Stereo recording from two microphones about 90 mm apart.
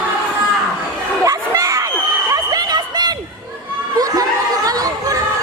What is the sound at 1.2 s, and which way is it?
Crowd, 35° right (ahead or behind).